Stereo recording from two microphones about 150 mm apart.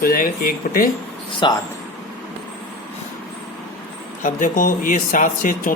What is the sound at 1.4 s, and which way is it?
Speech, 30° left (ahead or behind).